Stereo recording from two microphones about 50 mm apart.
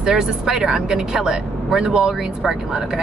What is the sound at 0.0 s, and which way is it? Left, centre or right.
Speech, centre.